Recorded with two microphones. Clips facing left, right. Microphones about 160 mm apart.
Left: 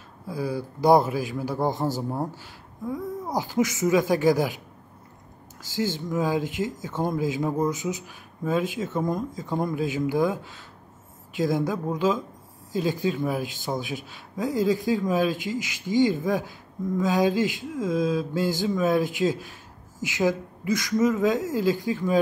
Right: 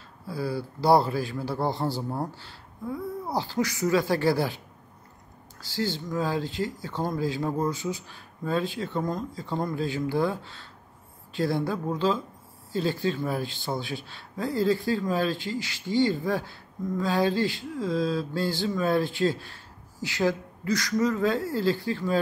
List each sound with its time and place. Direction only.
0.3 s speech: 15° left (ahead or behind)
5.7 s speech: 20° left (ahead or behind)